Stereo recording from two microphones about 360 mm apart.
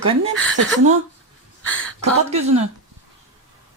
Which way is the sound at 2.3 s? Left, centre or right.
Centre.